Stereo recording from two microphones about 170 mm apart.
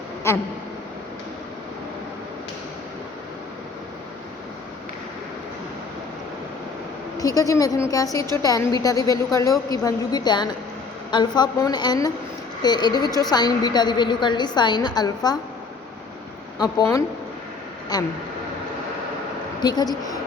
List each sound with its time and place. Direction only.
7.2 s a woman's voice: 20° left (ahead or behind)
16.6 s a woman's voice: 20° left (ahead or behind)
19.6 s a woman's voice: 25° left (ahead or behind)